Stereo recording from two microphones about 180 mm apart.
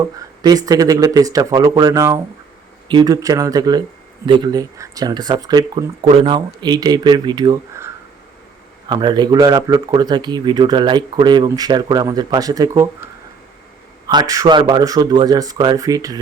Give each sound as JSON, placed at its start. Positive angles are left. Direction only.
{"t": 0.0, "sound": "speech", "side_deg": -20}
{"t": 8.9, "sound": "speech", "side_deg": -25}
{"t": 14.1, "sound": "speech", "side_deg": -20}